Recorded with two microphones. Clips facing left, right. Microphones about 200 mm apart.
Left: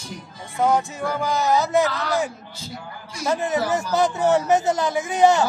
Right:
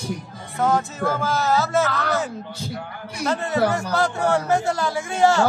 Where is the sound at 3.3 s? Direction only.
15° left (ahead or behind).